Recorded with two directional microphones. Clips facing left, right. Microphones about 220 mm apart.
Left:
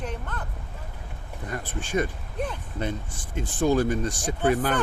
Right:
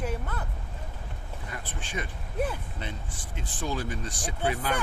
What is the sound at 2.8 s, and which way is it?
Speech, 45° left (ahead or behind).